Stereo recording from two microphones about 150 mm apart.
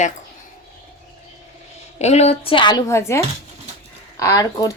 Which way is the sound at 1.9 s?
45° left (ahead or behind).